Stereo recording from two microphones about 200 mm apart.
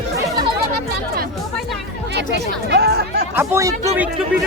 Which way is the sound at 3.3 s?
15° right (ahead or behind).